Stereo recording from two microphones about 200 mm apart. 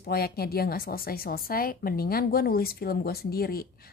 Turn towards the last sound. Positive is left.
turn(degrees=50)  # may be behind; listen again after turning